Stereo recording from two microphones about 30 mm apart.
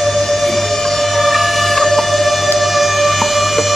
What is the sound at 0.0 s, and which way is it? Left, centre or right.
Music, centre.